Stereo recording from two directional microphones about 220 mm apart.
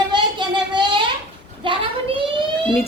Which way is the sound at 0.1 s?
20° right (ahead or behind).